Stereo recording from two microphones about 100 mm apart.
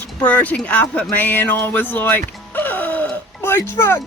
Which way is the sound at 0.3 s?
15° left (ahead or behind).